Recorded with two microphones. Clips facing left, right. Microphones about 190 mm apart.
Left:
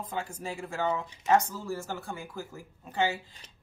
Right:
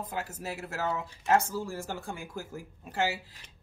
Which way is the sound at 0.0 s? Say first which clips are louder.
Left 1 dB; 5° right (ahead or behind).